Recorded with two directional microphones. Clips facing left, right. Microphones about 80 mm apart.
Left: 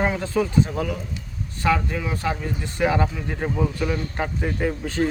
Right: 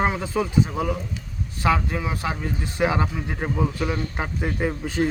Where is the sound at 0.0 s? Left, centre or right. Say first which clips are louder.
Left 1 dB; centre.